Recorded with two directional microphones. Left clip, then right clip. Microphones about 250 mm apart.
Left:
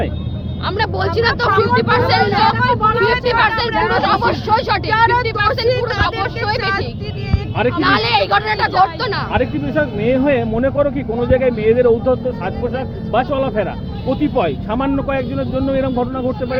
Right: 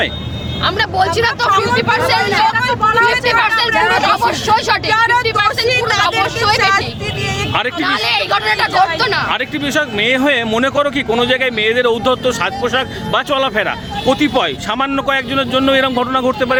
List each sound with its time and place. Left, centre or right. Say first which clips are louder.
0.6 s speech: right 5 dB; centre
4.9 s speech: right 1 dB; centre
6.6 s speech: right 7 dB; centre
7.8 s speech: left 3 dB; centre
9.3 s speech: right 1 dB; right